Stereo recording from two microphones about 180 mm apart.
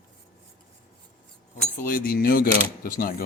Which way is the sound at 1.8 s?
50° left (ahead or behind).